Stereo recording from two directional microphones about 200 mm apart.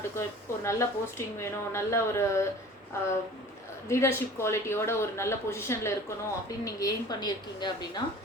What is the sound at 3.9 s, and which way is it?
A woman's voice, 15° left (ahead or behind).